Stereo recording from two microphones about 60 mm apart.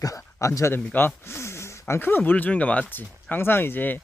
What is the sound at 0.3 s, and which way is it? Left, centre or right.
Speech, left.